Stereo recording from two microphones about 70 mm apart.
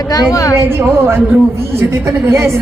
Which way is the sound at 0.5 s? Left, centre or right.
Right.